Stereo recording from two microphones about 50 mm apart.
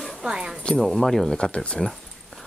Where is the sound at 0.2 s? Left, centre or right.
Centre.